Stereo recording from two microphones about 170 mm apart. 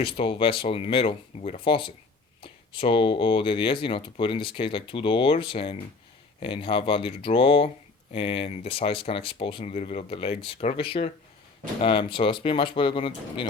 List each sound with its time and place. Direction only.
0.0 s speech: 30° left (ahead or behind)